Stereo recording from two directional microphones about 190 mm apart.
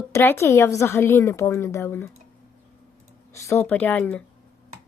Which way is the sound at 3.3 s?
15° left (ahead or behind).